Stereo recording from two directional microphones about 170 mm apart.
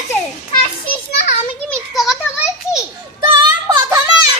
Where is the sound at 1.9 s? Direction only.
Centre (ahead or behind).